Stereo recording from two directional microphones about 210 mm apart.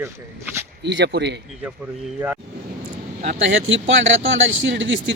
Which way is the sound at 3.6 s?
60° right (ahead or behind).